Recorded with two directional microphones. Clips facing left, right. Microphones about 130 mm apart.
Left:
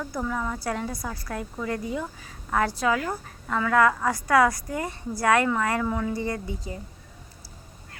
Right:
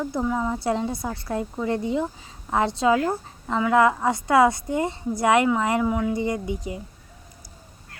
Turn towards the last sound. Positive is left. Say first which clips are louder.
# right 4 dB
turn(degrees=-20)  # may be behind; listen again after turning